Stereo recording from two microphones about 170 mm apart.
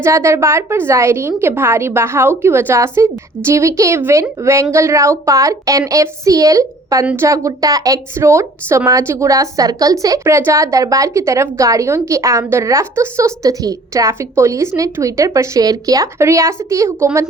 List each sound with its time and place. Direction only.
0.0 s a woman's voice: 15° right (ahead or behind)